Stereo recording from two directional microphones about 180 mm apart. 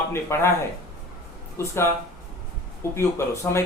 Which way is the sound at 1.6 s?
15° left (ahead or behind).